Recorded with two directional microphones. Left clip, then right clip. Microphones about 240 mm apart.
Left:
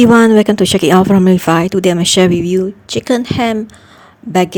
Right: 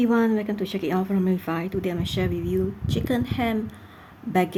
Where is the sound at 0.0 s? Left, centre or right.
Left.